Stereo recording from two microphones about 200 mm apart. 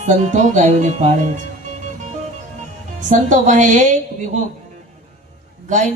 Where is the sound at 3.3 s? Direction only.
40° right (ahead or behind).